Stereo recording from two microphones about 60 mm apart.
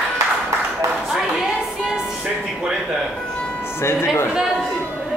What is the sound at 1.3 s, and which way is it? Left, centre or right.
Music, centre.